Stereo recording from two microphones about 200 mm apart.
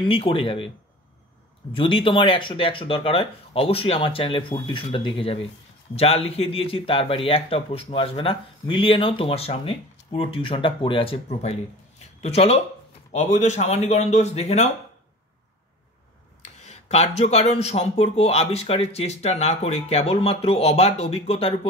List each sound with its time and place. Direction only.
0.0 s speech: 25° left (ahead or behind)
1.7 s speech: 25° left (ahead or behind)
16.6 s speech: 35° left (ahead or behind)